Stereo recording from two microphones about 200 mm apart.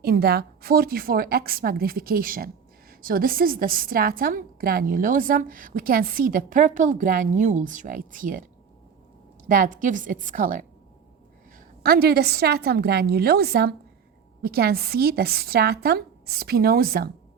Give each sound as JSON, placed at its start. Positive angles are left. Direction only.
{"t": 0.0, "sound": "a woman's voice", "side_deg": -50}
{"t": 9.5, "sound": "a woman's voice", "side_deg": -40}